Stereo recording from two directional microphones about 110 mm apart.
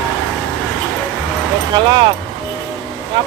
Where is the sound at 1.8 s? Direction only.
45° right (ahead or behind).